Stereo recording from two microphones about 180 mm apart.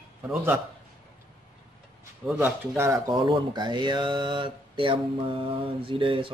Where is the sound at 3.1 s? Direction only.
25° right (ahead or behind).